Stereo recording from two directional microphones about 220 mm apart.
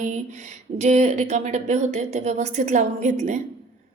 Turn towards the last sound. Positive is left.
turn(degrees=-30)  # may be behind; listen again after turning